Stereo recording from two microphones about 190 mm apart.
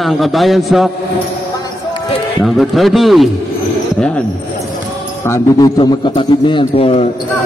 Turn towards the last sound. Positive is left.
turn(degrees=30)  # may be behind; listen again after turning